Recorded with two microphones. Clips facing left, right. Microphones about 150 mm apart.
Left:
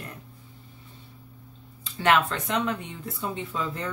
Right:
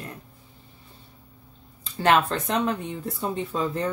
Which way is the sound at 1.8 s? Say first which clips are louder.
Right 2 dB; 35° right (ahead or behind).